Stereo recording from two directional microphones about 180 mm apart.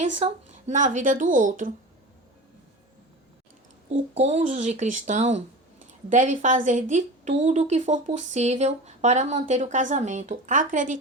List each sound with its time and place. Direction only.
0.2 s a woman's voice: 40° right (ahead or behind)
4.1 s a woman's voice: 35° right (ahead or behind)